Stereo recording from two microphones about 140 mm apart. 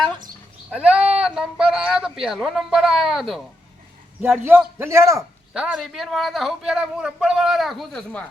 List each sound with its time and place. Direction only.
0.7 s a woman's voice: 10° right (ahead or behind)
4.2 s a man's voice: 15° right (ahead or behind)
5.5 s a woman's voice: 5° right (ahead or behind)